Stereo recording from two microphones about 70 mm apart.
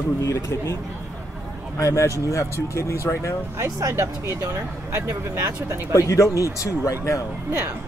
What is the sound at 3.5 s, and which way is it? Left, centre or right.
Speech, right.